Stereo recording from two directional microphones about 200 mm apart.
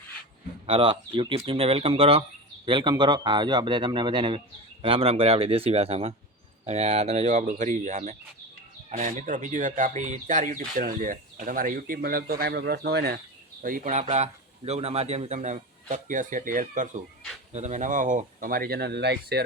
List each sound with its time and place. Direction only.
0.7 s a man's voice: 25° right (ahead or behind); by 14.0 s 40° right (ahead or behind)
14.0 s a man's voice: 30° right (ahead or behind); by 19.5 s 55° right (ahead or behind)